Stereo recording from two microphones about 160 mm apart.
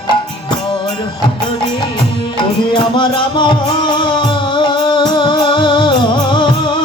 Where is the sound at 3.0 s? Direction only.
30° left (ahead or behind).